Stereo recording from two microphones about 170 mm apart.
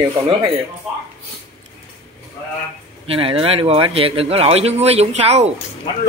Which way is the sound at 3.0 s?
30° right (ahead or behind).